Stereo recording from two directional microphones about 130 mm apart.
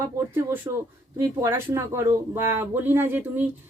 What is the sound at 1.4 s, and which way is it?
Speech, 15° right (ahead or behind).